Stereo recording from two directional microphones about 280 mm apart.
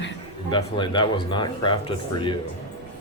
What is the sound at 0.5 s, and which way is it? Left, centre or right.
Speech, centre.